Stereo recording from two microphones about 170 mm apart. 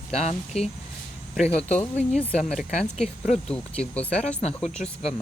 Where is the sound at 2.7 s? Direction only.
40° left (ahead or behind).